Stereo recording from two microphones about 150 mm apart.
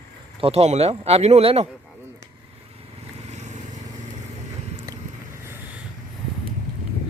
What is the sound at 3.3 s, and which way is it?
Vehicle, 50° right (ahead or behind).